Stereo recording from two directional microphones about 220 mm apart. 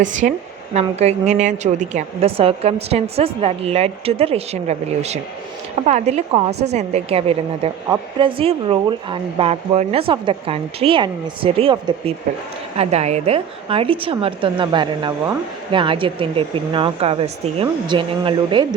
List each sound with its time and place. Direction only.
0.0 s a woman's voice: 35° right (ahead or behind)
6.5 s a woman's voice: 50° right (ahead or behind)
6.7 s a woman's voice: 30° right (ahead or behind)